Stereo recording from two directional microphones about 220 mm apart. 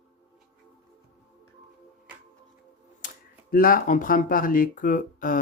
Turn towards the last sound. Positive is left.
turn(degrees=40)  # may be behind; listen again after turning